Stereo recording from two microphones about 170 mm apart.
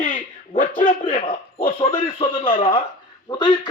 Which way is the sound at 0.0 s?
45° left (ahead or behind).